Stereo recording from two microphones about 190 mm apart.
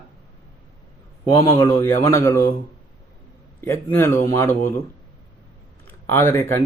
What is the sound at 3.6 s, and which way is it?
Speech, 10° left (ahead or behind).